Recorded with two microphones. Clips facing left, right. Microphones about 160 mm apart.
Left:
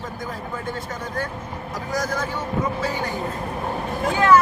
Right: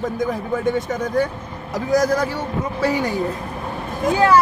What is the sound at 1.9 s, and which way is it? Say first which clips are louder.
Speech: right 9 dB; 40° right (ahead or behind).